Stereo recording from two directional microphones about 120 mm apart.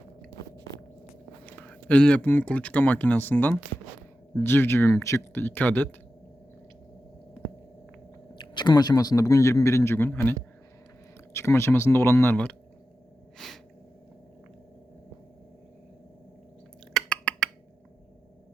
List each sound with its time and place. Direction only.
1.5 s speech: 10° left (ahead or behind)
8.4 s speech: 40° left (ahead or behind); by 10.3 s 15° left (ahead or behind)
11.3 s speech: 20° left (ahead or behind)
13.4 s sneeze: 5° left (ahead or behind)
16.9 s a sound: 5° left (ahead or behind)